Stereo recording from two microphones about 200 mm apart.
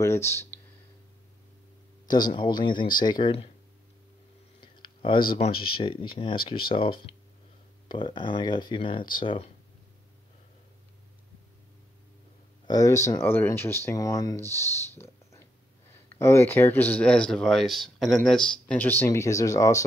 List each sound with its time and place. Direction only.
0.3 s speech: 10° left (ahead or behind)
2.3 s speech: 25° left (ahead or behind)
4.6 s a sound: 25° left (ahead or behind)
5.3 s speech: 25° left (ahead or behind)
12.6 s speech: 15° left (ahead or behind)